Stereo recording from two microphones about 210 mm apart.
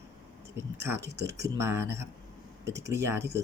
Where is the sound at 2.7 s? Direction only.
55° right (ahead or behind).